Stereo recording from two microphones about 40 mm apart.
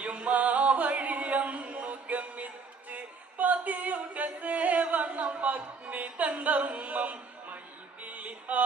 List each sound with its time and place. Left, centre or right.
0.0 s music: right
2.9 s singing: right
8.0 s a sound: right